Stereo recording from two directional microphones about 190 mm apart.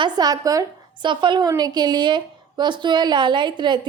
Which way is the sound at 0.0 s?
20° right (ahead or behind).